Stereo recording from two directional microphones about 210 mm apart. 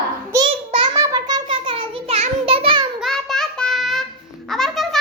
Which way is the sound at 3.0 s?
Centre (ahead or behind).